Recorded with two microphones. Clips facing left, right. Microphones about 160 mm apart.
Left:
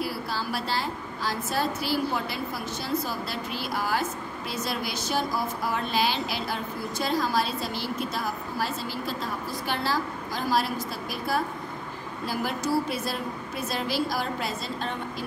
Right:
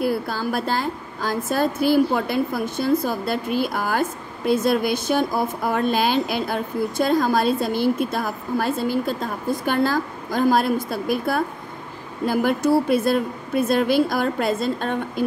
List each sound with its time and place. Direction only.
0.0 s a woman's voice: 50° right (ahead or behind)